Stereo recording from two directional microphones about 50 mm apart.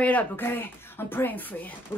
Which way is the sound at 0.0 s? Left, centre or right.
Left.